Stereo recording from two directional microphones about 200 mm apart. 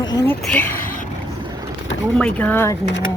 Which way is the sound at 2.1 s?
5° left (ahead or behind).